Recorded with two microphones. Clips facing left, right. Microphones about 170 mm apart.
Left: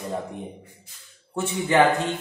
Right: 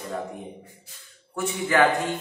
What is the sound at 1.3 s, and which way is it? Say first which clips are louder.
Speech: left 2 dB; 25° left (ahead or behind).